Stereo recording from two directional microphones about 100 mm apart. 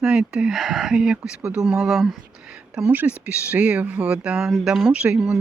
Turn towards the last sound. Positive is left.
turn(degrees=-10)  # may be behind; listen again after turning